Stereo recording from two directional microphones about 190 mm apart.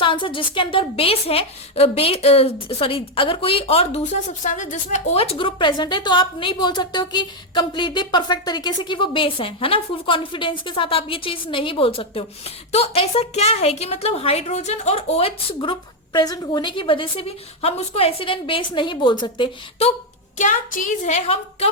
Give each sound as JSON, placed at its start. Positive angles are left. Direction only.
{"t": 0.0, "sound": "a woman's voice", "side_deg": 25}
{"t": 20.4, "sound": "a woman's voice", "side_deg": 45}